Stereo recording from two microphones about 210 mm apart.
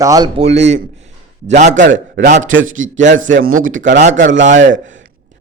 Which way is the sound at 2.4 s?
65° right (ahead or behind).